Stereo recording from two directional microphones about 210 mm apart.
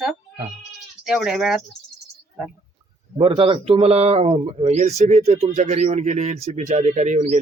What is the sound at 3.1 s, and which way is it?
Speech, 25° right (ahead or behind).